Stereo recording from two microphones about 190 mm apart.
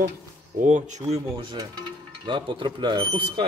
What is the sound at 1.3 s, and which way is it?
Speech, 20° right (ahead or behind).